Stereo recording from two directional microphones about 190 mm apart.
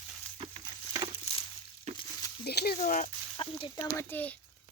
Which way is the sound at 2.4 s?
55° left (ahead or behind).